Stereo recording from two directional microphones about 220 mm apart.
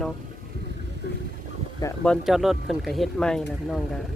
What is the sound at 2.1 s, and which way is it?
Speech, centre (ahead or behind).